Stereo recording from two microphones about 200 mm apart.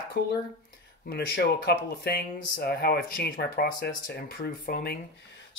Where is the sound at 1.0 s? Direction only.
50° left (ahead or behind).